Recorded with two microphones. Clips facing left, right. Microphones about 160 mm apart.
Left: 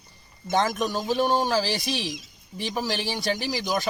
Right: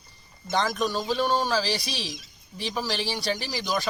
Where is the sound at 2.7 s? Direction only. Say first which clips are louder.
Left 1 dB; 15° left (ahead or behind).